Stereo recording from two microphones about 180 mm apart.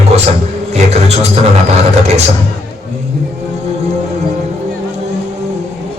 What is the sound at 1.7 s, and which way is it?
Speech, 40° right (ahead or behind).